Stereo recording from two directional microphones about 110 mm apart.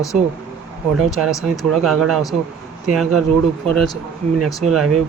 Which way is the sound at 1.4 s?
Centre (ahead or behind).